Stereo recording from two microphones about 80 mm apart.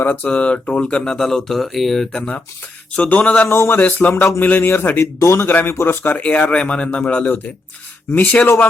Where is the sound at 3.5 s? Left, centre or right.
Left.